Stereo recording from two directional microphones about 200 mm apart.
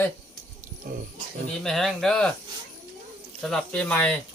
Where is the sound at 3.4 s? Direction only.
5° left (ahead or behind).